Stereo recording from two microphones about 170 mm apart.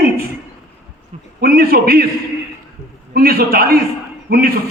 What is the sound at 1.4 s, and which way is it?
Speech, 60° right (ahead or behind).